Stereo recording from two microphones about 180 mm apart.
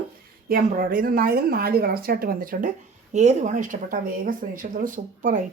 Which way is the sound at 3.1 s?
40° right (ahead or behind).